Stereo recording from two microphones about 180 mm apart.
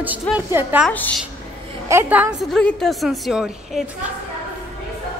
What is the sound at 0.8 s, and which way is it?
Speech, 10° left (ahead or behind).